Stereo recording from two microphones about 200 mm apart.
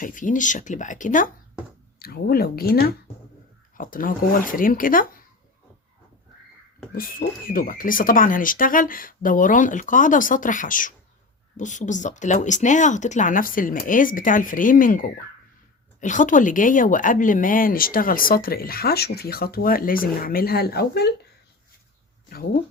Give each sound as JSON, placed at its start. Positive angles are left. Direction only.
{"t": 0.0, "sound": "speech", "side_deg": 40}
{"t": 6.9, "sound": "speech", "side_deg": 45}